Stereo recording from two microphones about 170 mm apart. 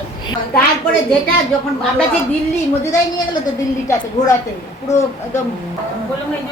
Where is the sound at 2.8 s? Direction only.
20° left (ahead or behind).